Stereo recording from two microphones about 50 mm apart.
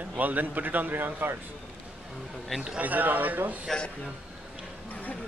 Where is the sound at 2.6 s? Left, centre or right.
Right.